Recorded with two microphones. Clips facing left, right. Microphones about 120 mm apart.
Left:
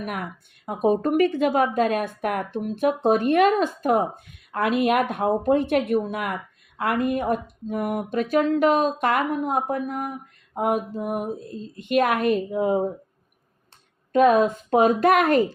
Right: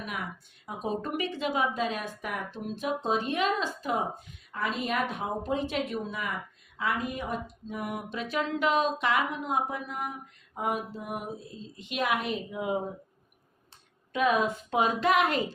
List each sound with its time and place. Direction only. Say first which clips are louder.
0.0 s speech: left 6 dB; 55° left (ahead or behind)
14.1 s speech: left 9 dB; 45° left (ahead or behind)